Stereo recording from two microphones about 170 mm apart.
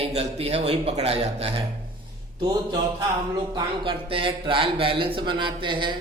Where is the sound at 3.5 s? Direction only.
30° right (ahead or behind).